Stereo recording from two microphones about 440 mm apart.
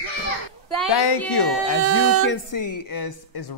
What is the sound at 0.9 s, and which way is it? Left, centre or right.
Speech, left.